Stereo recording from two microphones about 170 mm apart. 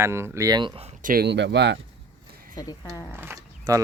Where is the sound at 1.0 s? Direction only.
60° right (ahead or behind); by 1.8 s 90° right.